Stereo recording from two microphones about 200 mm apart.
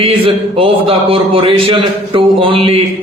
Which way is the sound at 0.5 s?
30° right (ahead or behind).